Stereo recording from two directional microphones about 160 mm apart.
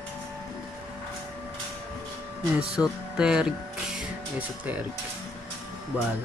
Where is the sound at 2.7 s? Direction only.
5° right (ahead or behind).